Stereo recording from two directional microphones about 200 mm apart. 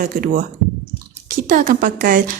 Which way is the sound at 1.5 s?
40° right (ahead or behind).